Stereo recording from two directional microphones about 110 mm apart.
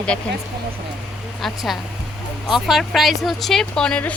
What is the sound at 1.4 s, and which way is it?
A woman's voice, centre (ahead or behind).